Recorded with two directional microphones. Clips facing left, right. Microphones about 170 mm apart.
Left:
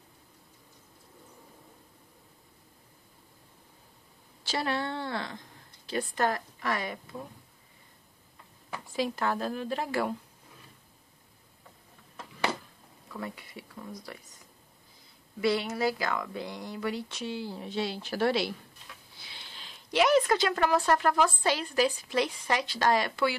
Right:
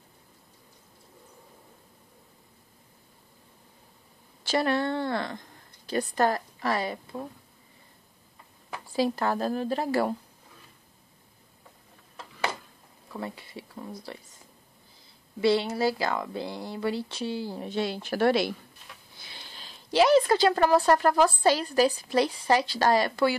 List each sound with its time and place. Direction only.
4.4 s a woman's voice: 50° right (ahead or behind); by 7.2 s 30° right (ahead or behind)
8.8 s speech: 35° right (ahead or behind)
13.1 s speech: 30° right (ahead or behind)
15.4 s speech: 30° right (ahead or behind)